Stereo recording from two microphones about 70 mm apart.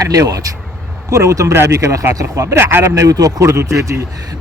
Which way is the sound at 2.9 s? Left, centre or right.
Right.